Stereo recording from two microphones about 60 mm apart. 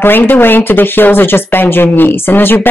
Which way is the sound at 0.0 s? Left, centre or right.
Left.